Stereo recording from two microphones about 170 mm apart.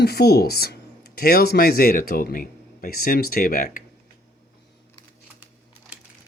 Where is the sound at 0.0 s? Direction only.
70° left (ahead or behind); by 3.8 s 55° left (ahead or behind).